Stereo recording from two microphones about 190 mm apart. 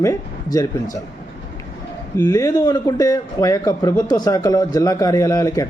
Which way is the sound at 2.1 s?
15° left (ahead or behind).